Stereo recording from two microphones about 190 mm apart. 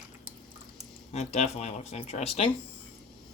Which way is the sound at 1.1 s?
35° left (ahead or behind).